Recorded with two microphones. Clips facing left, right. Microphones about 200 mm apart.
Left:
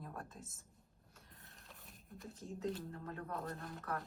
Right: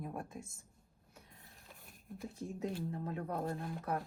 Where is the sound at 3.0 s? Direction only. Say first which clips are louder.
Right 5 dB; 20° right (ahead or behind).